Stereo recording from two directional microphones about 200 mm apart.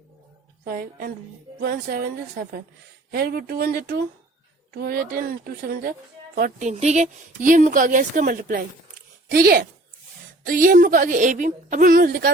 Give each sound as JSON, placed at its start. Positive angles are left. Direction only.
{"t": 0.6, "sound": "a woman's voice", "side_deg": -45}